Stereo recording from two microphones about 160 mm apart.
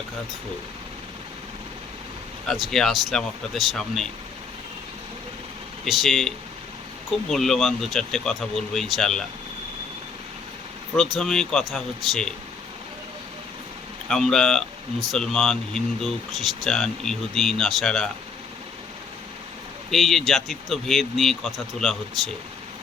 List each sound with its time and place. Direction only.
2.5 s speech: centre (ahead or behind)
5.8 s speech: centre (ahead or behind)
10.9 s speech: centre (ahead or behind)
14.1 s speech: 5° left (ahead or behind)
19.9 s speech: centre (ahead or behind)